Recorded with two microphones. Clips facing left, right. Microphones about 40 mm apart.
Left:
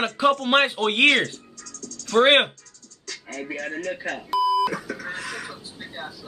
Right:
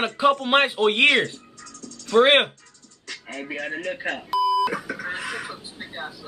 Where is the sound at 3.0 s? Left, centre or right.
Centre.